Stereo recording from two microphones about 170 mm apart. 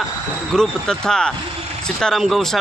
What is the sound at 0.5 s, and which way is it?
Speech, 5° left (ahead or behind).